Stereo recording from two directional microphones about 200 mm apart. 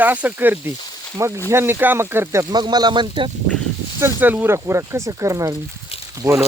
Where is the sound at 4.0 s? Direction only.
10° right (ahead or behind).